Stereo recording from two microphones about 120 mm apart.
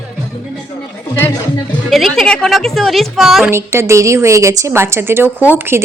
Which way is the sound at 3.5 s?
20° right (ahead or behind).